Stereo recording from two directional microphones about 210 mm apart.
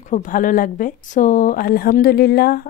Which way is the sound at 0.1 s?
40° left (ahead or behind).